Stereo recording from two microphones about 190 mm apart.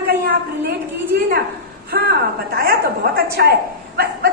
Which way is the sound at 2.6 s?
55° right (ahead or behind).